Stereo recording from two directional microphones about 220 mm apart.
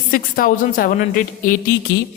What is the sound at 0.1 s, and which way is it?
A woman's voice, 40° left (ahead or behind).